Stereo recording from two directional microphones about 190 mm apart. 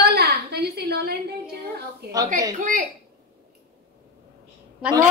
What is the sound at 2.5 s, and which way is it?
Speech, 45° right (ahead or behind).